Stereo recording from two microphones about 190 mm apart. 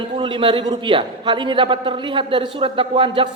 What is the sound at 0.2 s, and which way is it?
A man's voice, 25° right (ahead or behind).